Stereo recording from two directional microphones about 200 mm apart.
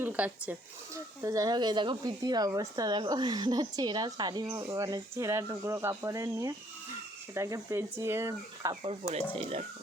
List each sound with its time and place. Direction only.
0.0 s speech: 5° right (ahead or behind)
8.8 s speech: 30° right (ahead or behind)